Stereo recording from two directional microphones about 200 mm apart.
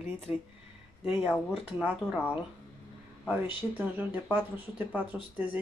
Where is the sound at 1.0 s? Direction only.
5° right (ahead or behind).